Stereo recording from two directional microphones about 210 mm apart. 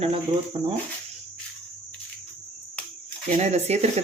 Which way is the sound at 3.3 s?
30° right (ahead or behind).